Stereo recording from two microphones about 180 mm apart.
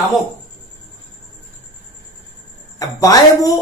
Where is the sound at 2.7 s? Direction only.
20° left (ahead or behind).